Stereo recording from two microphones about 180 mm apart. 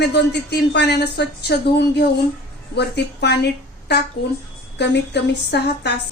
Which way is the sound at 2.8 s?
65° left (ahead or behind).